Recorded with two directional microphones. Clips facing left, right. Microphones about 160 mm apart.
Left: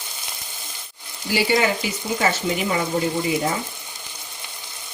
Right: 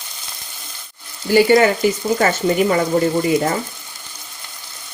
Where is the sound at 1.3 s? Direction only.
50° right (ahead or behind).